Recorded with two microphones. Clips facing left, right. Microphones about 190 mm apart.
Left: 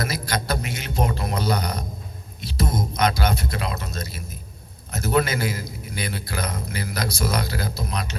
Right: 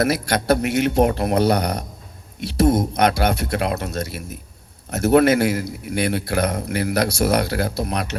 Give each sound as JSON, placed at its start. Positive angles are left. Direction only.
{"t": 0.0, "sound": "a man's voice", "side_deg": -65}